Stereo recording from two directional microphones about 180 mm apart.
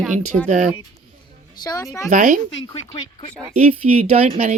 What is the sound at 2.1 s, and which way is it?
Speech, 45° right (ahead or behind).